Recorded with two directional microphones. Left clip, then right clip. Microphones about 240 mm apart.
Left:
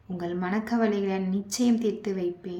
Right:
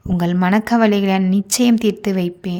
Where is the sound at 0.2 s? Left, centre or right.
Right.